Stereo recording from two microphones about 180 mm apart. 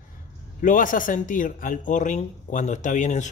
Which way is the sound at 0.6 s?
45° left (ahead or behind).